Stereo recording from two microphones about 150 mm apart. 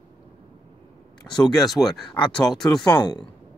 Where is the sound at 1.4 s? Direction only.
Centre (ahead or behind).